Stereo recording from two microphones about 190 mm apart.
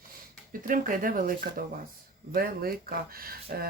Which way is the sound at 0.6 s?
45° right (ahead or behind).